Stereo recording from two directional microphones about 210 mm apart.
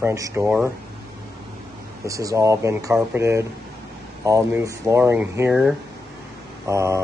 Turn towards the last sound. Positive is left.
turn(degrees=-15)  # may be behind; listen again after turning